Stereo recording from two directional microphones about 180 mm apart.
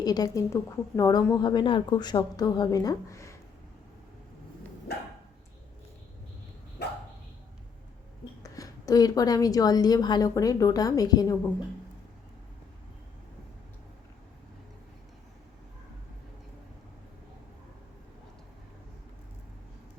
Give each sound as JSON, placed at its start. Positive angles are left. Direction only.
{"t": 0.0, "sound": "speech", "side_deg": 20}
{"t": 6.8, "sound": "dog", "side_deg": 65}
{"t": 8.4, "sound": "speech", "side_deg": 20}